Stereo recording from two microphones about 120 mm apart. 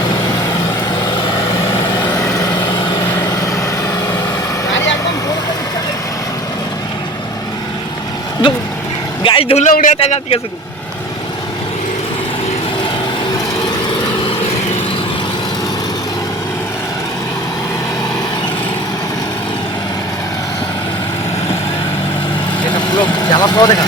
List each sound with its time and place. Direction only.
1.7 s vehicle: 20° left (ahead or behind)
9.2 s vehicle: 45° left (ahead or behind)
9.6 s a man's voice: 85° left
22.6 s vehicle: 40° left (ahead or behind)